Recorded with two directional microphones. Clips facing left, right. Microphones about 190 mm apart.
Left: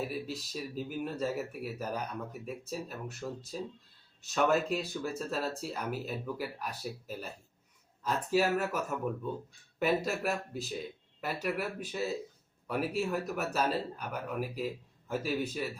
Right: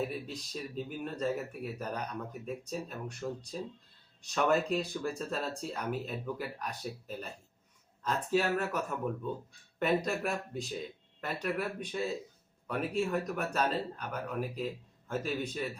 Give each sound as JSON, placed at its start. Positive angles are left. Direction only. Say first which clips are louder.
{"t": 0.0, "sound": "speech", "louder": "even", "side_deg": 5}